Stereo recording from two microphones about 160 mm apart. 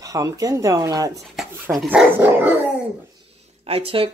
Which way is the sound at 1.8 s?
10° right (ahead or behind).